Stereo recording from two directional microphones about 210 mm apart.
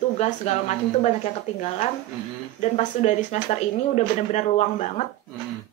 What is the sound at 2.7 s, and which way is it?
Speech, 35° left (ahead or behind).